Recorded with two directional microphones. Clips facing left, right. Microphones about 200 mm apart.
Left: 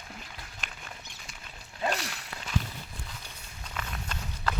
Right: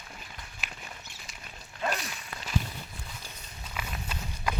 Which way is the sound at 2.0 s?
75° left (ahead or behind).